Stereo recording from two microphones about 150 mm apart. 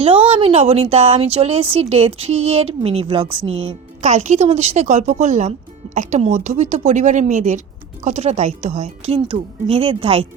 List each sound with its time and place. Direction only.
0.0 s a woman's voice: 40° right (ahead or behind)